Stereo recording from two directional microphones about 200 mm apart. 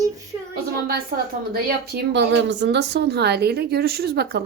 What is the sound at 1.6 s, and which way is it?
Speech, 55° right (ahead or behind).